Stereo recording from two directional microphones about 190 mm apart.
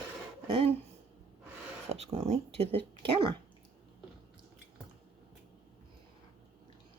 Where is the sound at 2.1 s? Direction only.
35° right (ahead or behind).